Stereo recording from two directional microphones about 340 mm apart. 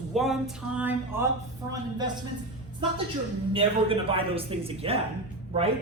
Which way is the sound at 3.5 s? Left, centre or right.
Centre.